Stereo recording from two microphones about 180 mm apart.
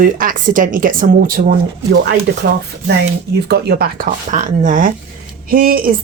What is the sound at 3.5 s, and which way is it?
A woman's voice, 65° right (ahead or behind).